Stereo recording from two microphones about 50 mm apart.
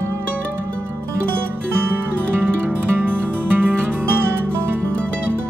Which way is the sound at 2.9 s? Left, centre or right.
Right.